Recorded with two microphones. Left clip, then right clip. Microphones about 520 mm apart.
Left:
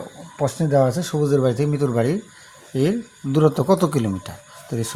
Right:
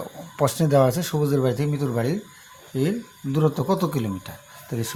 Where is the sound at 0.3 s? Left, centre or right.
Right.